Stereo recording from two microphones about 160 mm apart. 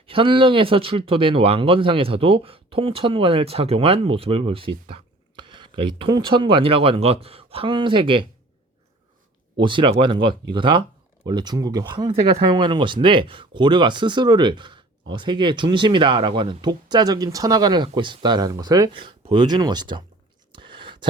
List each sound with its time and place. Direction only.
0.0 s speech: 35° right (ahead or behind)
9.6 s speech: 30° right (ahead or behind)
20.5 s a sound: 30° right (ahead or behind)